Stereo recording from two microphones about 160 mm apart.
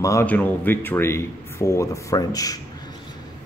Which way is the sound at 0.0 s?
20° left (ahead or behind).